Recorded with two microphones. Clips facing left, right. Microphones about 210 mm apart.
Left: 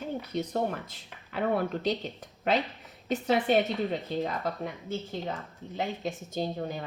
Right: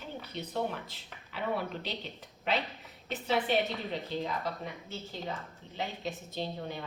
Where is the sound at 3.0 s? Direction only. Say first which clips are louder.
Left 5 dB; 45° left (ahead or behind).